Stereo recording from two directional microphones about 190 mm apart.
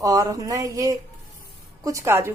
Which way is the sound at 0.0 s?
20° right (ahead or behind).